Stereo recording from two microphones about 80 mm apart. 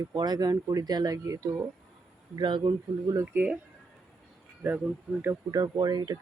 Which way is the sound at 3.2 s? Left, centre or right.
Right.